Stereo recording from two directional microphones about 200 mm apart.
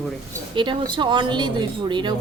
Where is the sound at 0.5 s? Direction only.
25° right (ahead or behind).